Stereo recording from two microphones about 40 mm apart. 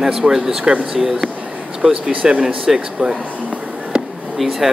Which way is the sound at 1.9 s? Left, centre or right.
Right.